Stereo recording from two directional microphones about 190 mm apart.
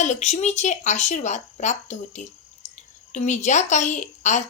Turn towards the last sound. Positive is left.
turn(degrees=40)  # may be behind; listen again after turning